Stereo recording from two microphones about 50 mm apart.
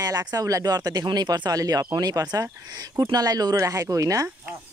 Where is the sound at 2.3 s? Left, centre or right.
Right.